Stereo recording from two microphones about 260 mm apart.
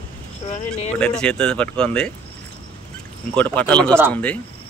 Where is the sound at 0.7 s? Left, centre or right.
Centre.